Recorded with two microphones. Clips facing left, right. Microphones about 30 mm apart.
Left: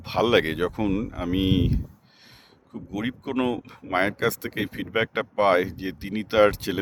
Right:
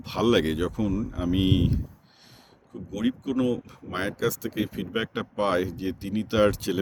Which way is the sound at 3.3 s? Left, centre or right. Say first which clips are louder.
Left 4 dB; left.